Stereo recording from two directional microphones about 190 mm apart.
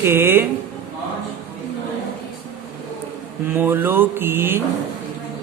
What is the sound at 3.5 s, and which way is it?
Speech, 10° right (ahead or behind).